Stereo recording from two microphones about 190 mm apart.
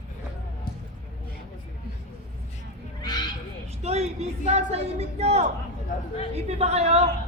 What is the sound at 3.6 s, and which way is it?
Speech, 35° right (ahead or behind).